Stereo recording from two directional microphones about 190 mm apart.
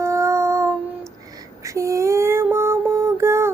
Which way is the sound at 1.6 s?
15° right (ahead or behind).